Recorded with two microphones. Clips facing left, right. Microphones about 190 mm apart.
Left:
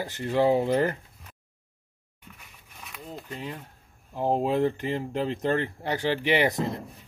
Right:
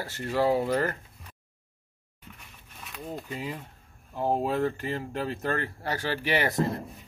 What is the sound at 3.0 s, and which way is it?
Speech, 5° right (ahead or behind).